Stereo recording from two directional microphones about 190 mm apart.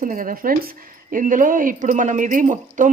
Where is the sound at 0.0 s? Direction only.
45° right (ahead or behind).